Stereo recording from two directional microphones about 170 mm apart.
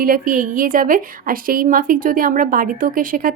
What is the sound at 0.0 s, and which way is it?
Speech, 55° right (ahead or behind).